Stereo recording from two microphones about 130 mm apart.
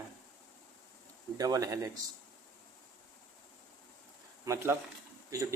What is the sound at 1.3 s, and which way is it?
Speech, 25° right (ahead or behind).